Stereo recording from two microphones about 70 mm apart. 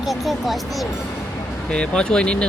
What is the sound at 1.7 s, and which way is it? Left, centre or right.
Speech, centre.